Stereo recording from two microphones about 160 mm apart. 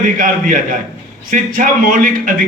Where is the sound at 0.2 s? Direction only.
55° right (ahead or behind).